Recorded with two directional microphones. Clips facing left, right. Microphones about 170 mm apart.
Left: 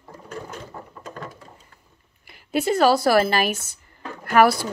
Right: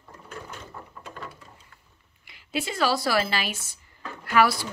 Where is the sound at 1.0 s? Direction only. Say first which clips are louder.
Left 4 dB; 45° left (ahead or behind).